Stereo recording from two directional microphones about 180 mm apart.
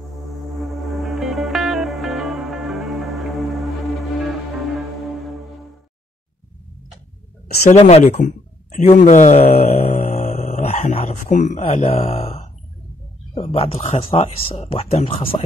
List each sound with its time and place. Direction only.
0.0 s music: centre (ahead or behind)
7.4 s speech: 40° left (ahead or behind)